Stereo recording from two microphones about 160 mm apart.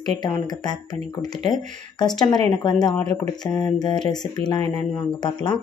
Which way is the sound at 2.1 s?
25° left (ahead or behind).